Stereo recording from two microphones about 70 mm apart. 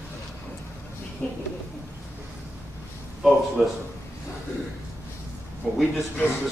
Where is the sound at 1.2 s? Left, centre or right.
Centre.